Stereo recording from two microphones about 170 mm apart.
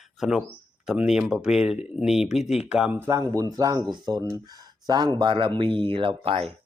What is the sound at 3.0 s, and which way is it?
Speech, 20° right (ahead or behind).